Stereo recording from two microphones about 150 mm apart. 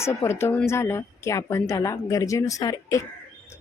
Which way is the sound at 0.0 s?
15° left (ahead or behind).